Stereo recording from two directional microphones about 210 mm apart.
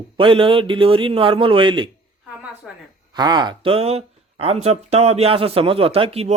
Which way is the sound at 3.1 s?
20° right (ahead or behind).